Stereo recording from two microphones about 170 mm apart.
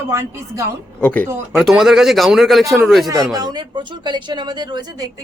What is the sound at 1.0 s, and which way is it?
Speech, 10° left (ahead or behind).